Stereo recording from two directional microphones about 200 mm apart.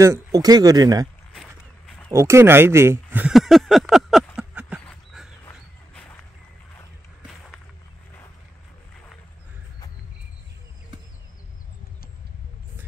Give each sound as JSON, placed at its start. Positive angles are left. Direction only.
{"t": 0.0, "sound": "speech", "side_deg": -15}
{"t": 2.1, "sound": "speech", "side_deg": -15}
{"t": 4.4, "sound": "a sound", "side_deg": -5}
{"t": 4.8, "sound": "dog", "side_deg": 0}